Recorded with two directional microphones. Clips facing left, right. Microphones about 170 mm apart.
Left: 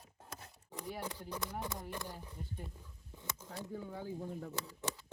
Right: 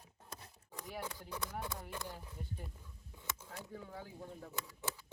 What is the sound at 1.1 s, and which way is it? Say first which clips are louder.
Speech: left 2 dB; 15° left (ahead or behind).